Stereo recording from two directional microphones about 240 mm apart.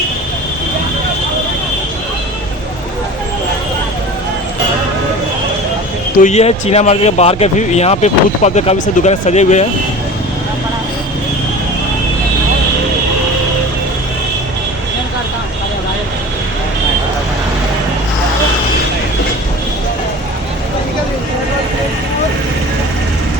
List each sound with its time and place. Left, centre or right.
6.2 s speech: left